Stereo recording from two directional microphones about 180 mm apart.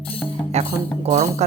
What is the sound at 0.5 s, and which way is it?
Music, 35° right (ahead or behind).